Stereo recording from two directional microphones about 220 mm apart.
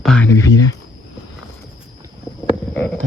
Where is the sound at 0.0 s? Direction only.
5° left (ahead or behind).